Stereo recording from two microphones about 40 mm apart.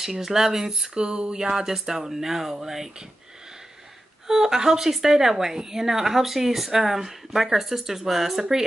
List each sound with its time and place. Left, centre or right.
0.0 s a woman's voice: centre
0.9 s a woman's voice: right
4.3 s a woman's voice: centre